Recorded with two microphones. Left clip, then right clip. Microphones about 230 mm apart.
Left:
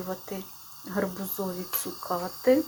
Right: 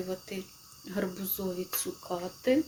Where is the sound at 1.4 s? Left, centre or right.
Centre.